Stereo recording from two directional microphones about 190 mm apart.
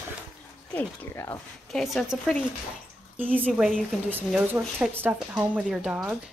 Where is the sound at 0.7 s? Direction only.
10° left (ahead or behind).